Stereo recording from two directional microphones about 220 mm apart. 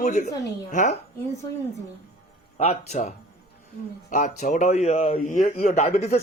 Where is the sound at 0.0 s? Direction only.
35° left (ahead or behind).